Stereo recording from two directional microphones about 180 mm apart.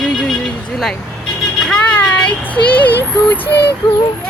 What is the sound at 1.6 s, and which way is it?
Child singing, 5° left (ahead or behind).